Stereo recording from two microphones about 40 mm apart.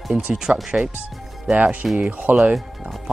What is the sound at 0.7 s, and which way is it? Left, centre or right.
Speech, right.